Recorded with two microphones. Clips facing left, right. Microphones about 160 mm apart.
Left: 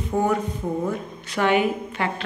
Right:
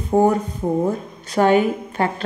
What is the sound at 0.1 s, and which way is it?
A woman's voice, 40° right (ahead or behind).